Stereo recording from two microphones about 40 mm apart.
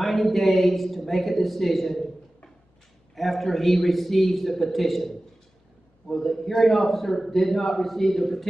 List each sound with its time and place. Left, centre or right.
0.0 s speech: centre
3.2 s a man's voice: centre